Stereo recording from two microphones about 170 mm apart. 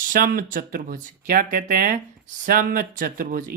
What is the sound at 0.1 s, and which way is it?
Speech, 55° right (ahead or behind).